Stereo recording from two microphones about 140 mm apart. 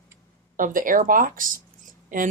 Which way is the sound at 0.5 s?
75° right (ahead or behind).